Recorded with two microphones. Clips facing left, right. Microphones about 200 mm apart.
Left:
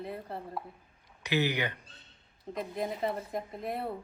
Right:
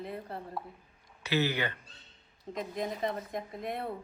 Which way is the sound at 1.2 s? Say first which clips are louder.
Even; 15° left (ahead or behind).